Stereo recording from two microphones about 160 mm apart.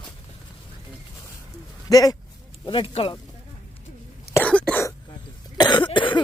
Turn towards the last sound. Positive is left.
turn(degrees=30)  # may be behind; listen again after turning